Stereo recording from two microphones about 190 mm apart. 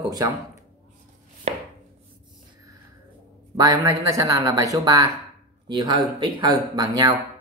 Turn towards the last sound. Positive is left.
turn(degrees=-20)  # may be behind; listen again after turning